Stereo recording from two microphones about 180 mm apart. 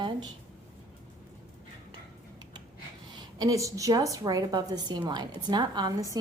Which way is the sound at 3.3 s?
20° right (ahead or behind).